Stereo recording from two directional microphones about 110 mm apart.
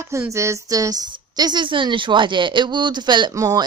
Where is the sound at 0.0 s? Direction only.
25° right (ahead or behind); by 3.3 s 45° right (ahead or behind).